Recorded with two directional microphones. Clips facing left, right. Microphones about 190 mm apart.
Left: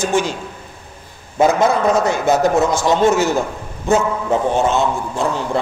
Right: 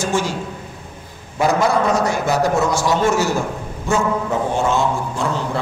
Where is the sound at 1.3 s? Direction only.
20° left (ahead or behind).